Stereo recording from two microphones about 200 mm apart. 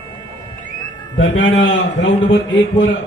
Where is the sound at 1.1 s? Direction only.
70° left (ahead or behind).